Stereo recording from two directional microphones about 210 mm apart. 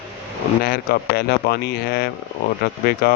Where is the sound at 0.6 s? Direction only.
45° left (ahead or behind).